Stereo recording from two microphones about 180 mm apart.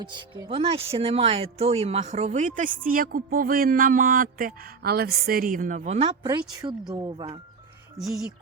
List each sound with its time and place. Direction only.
0.1 s speech: 25° right (ahead or behind)
6.9 s speech: 20° right (ahead or behind)
8.0 s speech: centre (ahead or behind)